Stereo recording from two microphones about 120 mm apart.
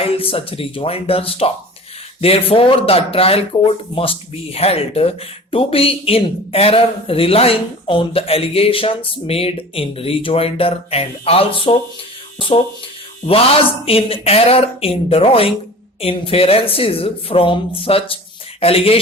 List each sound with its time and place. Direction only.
0.0 s speech: 50° left (ahead or behind)
13.8 s speech: 50° left (ahead or behind)